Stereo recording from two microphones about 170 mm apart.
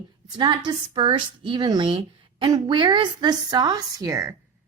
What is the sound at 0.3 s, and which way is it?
A woman's voice, 25° right (ahead or behind).